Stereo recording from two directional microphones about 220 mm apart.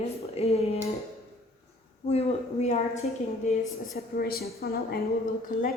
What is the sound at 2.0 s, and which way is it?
A woman's voice, 30° left (ahead or behind).